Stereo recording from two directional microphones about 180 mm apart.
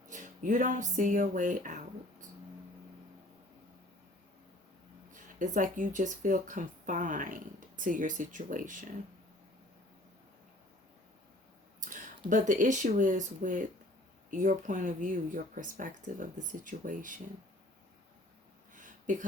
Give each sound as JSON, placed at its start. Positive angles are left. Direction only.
{"t": 0.1, "sound": "speech", "side_deg": -45}
{"t": 5.1, "sound": "speech", "side_deg": -45}
{"t": 11.8, "sound": "speech", "side_deg": -45}
{"t": 18.7, "sound": "a sound", "side_deg": -45}